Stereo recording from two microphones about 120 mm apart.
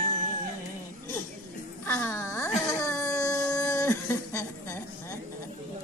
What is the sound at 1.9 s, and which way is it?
Speech, 20° left (ahead or behind).